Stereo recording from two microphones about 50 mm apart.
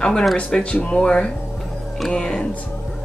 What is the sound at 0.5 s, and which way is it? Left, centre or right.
Speech, centre.